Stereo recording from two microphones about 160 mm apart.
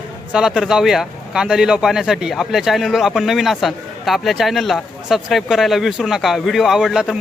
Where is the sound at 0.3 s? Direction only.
5° right (ahead or behind).